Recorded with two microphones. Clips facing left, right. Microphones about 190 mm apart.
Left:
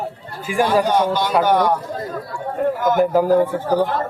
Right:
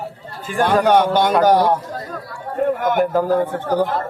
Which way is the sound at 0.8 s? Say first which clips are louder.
Right 3 dB; 65° right (ahead or behind).